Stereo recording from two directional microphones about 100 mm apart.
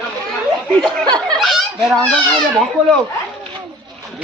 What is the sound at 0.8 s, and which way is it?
Snicker, 5° left (ahead or behind).